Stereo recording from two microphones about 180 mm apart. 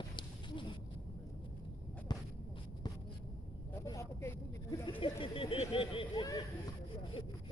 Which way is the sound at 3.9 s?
15° left (ahead or behind).